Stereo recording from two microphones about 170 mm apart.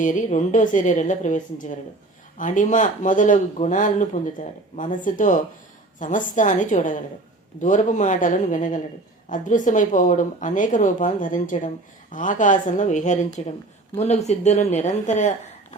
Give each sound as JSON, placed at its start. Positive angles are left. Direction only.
{"t": 0.0, "sound": "speech", "side_deg": 50}